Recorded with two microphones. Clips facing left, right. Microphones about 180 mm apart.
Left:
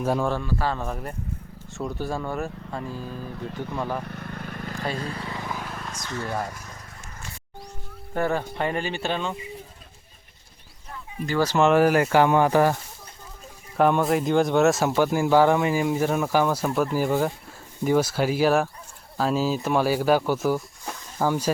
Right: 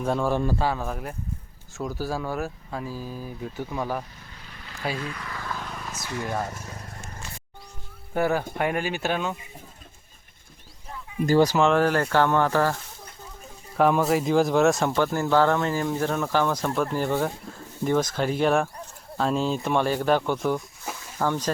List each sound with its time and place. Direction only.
0.0 s speech: 5° left (ahead or behind)
0.6 s speech: 5° right (ahead or behind)
3.3 s speech: 70° left (ahead or behind)
3.7 s speech: 10° right (ahead or behind)
4.0 s vehicle: 60° left (ahead or behind)
4.9 s vehicle: 35° left (ahead or behind); by 6.3 s 10° right (ahead or behind)
8.1 s speech: 5° right (ahead or behind)
11.5 s speech: 5° left (ahead or behind)
13.7 s speech: centre (ahead or behind)